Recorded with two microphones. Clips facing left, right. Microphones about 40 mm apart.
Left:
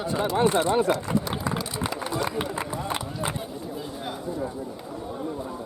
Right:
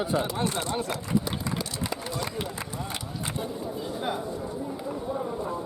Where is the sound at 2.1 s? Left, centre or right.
Centre.